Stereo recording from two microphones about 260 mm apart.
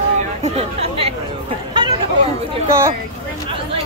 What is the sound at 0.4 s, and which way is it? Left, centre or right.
Chatter, right.